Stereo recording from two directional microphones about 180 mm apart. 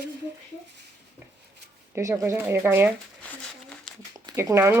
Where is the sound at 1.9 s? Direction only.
15° right (ahead or behind).